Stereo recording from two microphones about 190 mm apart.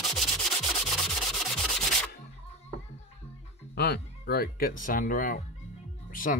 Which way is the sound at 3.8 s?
60° left (ahead or behind).